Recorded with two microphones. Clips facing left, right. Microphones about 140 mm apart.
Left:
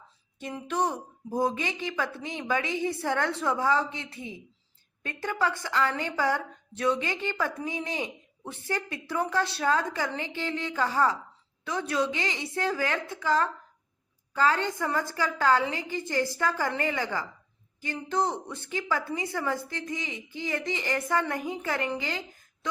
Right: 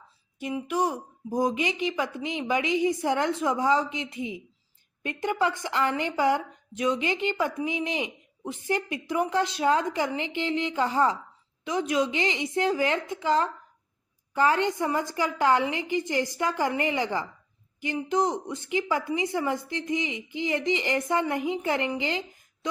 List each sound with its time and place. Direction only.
0.3 s a woman's voice: 10° right (ahead or behind)